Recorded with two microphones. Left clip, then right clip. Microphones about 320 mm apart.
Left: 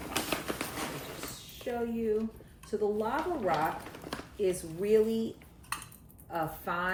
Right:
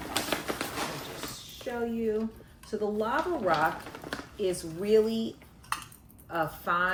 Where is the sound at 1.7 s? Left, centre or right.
Centre.